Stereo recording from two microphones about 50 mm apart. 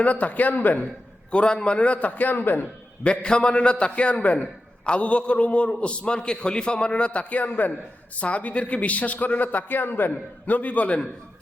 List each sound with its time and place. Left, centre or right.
0.0 s a man's voice: left
1.3 s a man's voice: left
3.0 s a man's voice: left